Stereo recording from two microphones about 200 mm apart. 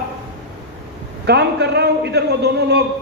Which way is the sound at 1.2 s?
55° right (ahead or behind).